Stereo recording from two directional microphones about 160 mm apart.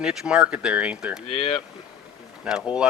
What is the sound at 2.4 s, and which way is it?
Speech, 5° right (ahead or behind).